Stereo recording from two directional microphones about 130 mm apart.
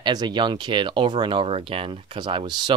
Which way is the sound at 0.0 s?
35° right (ahead or behind).